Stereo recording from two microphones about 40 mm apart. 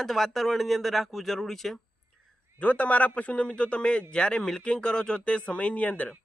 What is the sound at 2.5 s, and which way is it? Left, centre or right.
A man's voice, left.